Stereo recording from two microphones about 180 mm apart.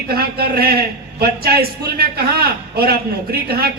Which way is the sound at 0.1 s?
60° right (ahead or behind).